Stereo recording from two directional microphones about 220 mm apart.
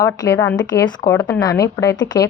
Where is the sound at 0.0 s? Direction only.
15° left (ahead or behind).